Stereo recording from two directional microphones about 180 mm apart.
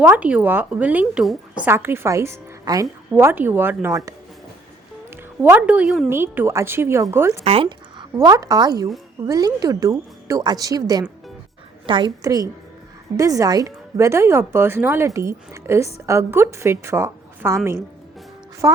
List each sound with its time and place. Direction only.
0.0 s a woman's voice: 5° right (ahead or behind)
1.6 s a woman's voice: 15° right (ahead or behind)
5.1 s a woman's voice: 10° right (ahead or behind)
7.4 s a woman's voice: 30° right (ahead or behind)